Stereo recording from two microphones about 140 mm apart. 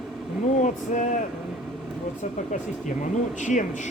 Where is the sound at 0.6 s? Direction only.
65° left (ahead or behind).